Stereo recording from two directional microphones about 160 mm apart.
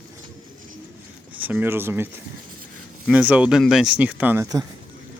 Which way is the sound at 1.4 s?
10° right (ahead or behind).